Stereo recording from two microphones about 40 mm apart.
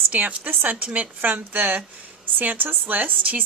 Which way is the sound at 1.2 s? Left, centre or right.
Right.